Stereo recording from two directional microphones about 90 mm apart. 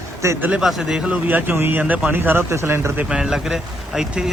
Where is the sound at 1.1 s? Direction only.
20° right (ahead or behind).